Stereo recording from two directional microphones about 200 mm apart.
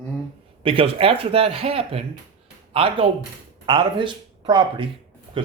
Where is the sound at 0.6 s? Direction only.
25° right (ahead or behind).